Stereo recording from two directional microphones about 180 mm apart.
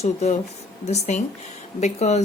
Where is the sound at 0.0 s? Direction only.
35° left (ahead or behind).